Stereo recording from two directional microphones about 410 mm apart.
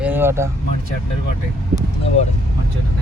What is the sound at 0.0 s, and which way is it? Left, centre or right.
Vehicle, centre.